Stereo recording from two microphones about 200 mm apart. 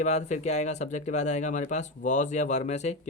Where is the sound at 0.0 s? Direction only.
35° left (ahead or behind).